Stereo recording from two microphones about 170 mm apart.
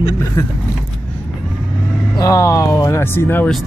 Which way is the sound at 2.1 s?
20° left (ahead or behind).